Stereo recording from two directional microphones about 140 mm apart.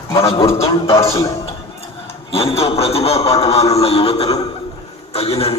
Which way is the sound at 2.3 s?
45° left (ahead or behind).